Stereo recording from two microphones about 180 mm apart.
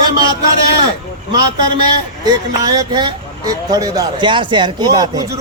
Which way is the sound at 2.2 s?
20° right (ahead or behind).